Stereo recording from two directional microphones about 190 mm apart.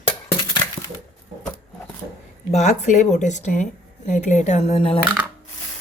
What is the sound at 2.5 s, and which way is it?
Speech, 35° left (ahead or behind).